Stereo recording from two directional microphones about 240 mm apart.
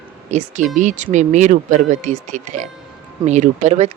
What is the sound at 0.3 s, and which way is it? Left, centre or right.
Speech, right.